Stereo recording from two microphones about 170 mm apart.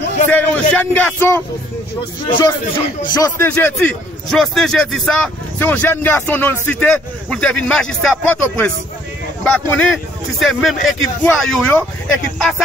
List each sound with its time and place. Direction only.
0.3 s a man's voice: 5° left (ahead or behind)
2.2 s speech: 30° left (ahead or behind)
3.3 s a man's voice: 10° left (ahead or behind)